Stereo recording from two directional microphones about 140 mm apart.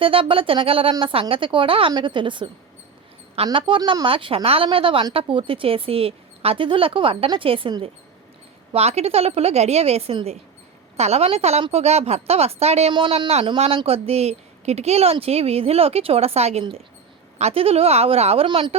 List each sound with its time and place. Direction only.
0.0 s a woman's voice: 40° right (ahead or behind)
8.7 s speech: 50° right (ahead or behind)
12.9 s speech: 35° right (ahead or behind)